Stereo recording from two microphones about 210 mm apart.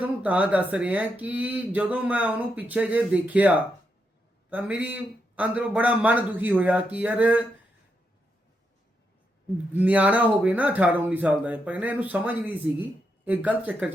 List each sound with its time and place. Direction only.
0.0 s speech: 5° right (ahead or behind)
9.7 s speech: 5° right (ahead or behind)